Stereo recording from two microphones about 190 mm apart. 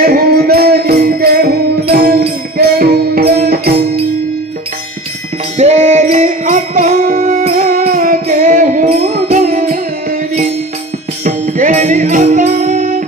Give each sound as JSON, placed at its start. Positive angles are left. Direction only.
{"t": 0.0, "sound": "music", "side_deg": -50}
{"t": 5.6, "sound": "music", "side_deg": -35}
{"t": 11.2, "sound": "music", "side_deg": -45}